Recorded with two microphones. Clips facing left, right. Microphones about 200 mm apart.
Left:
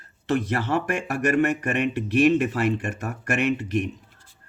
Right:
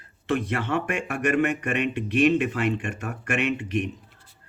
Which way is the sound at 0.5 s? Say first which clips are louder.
Left 2 dB; 40° left (ahead or behind).